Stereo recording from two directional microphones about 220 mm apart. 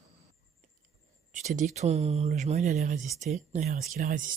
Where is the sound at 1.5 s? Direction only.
30° right (ahead or behind).